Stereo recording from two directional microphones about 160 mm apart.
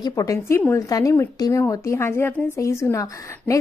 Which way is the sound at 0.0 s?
20° left (ahead or behind).